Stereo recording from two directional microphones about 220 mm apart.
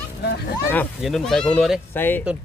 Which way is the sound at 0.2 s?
45° left (ahead or behind).